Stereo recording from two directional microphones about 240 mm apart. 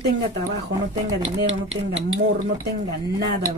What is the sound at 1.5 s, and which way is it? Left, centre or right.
Speech, right.